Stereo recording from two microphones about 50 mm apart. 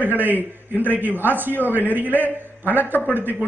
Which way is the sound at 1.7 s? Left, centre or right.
Left.